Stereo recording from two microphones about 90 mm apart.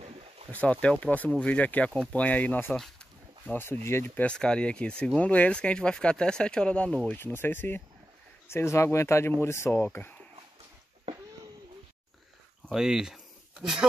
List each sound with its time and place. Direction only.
0.5 s speech: 15° left (ahead or behind)
7.2 s speech: 25° left (ahead or behind)
9.8 s speech: 20° left (ahead or behind)
12.7 s speech: 5° right (ahead or behind)